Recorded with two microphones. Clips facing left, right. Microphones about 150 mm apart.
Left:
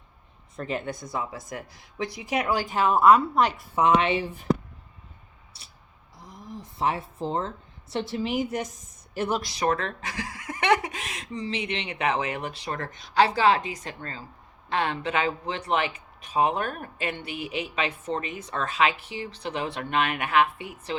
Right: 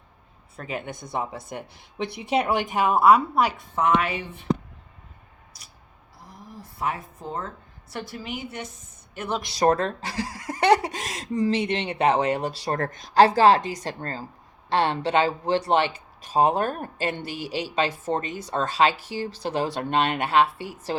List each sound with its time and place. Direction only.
0.5 s a woman's voice: 10° right (ahead or behind)
1.1 s a woman's voice: 30° right (ahead or behind); by 3.5 s 10° right (ahead or behind)
4.0 s speech: 30° left (ahead or behind)
5.5 s a sound: 30° left (ahead or behind)
6.2 s speech: 20° left (ahead or behind); by 8.7 s 40° left (ahead or behind)
9.6 s speech: 40° right (ahead or behind)